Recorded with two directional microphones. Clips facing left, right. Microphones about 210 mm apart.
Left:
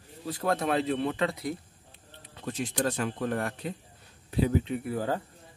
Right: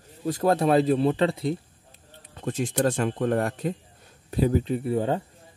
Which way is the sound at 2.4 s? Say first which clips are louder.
Right 5 dB; 45° right (ahead or behind).